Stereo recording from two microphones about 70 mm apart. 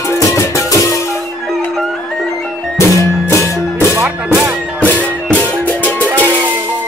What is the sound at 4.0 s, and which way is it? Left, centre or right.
Music, right.